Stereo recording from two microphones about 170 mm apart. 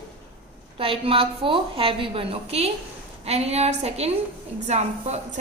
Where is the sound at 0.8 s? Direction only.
30° right (ahead or behind).